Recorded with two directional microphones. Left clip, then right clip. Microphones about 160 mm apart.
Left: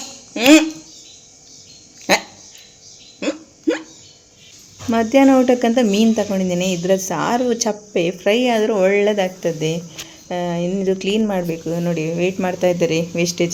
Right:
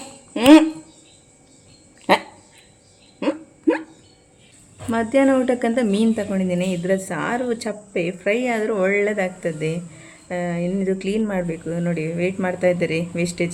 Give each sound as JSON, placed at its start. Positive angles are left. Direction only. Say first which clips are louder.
{"t": 0.3, "sound": "speech", "louder": "even", "side_deg": -10}
{"t": 3.2, "sound": "hiccup", "louder": "even", "side_deg": -10}
{"t": 4.9, "sound": "a woman's voice", "louder": "left 4 dB", "side_deg": 25}